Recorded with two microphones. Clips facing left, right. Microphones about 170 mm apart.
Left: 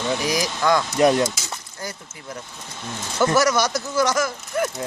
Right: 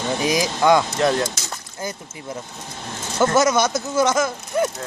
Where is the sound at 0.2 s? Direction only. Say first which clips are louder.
Right 3 dB; 20° right (ahead or behind).